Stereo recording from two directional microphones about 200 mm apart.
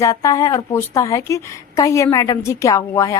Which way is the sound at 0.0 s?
15° left (ahead or behind).